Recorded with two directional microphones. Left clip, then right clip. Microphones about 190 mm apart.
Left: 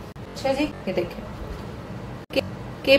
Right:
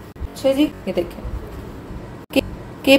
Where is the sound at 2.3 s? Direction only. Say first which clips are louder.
Right 5 dB; 40° right (ahead or behind).